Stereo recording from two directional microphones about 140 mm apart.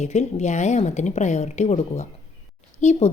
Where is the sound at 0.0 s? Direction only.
55° left (ahead or behind).